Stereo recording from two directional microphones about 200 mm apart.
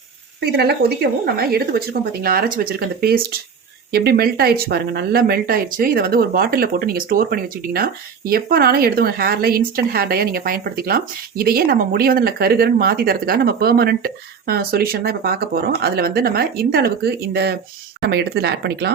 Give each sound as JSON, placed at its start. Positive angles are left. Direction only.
{"t": 0.4, "sound": "speech", "side_deg": -55}